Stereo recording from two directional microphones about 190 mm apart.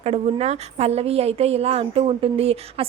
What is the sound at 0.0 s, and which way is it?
A woman's voice, 35° right (ahead or behind).